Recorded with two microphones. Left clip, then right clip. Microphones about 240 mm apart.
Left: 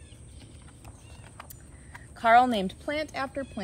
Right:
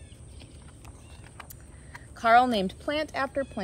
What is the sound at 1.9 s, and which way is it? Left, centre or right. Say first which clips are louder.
A woman's voice: even; centre.